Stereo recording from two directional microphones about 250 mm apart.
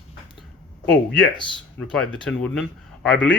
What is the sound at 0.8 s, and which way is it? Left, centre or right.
Speech, centre.